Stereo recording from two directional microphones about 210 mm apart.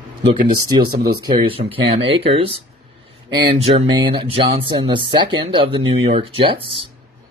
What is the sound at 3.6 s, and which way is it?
Speech, 25° right (ahead or behind).